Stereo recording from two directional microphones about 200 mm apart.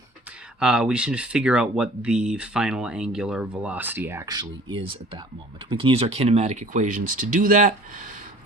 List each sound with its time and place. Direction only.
0.6 s speech: 5° right (ahead or behind); by 8.1 s 40° right (ahead or behind)